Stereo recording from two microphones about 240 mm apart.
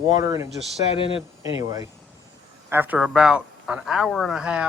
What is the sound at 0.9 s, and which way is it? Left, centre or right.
Speech, left.